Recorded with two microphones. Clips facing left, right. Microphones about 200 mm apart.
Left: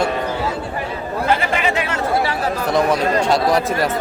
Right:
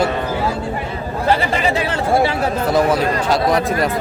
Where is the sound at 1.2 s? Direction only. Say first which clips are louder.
Right 2 dB; 35° right (ahead or behind).